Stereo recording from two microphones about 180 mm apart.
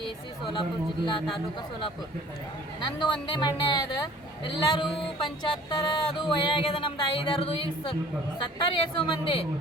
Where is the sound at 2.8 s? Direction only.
25° left (ahead or behind).